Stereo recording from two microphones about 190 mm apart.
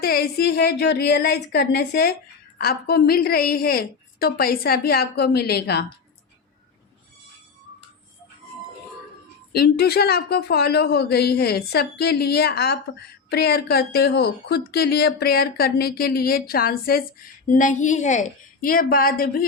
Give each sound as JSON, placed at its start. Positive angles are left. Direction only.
{"t": 0.0, "sound": "a woman's voice", "side_deg": 55}
{"t": 9.5, "sound": "a woman's voice", "side_deg": 55}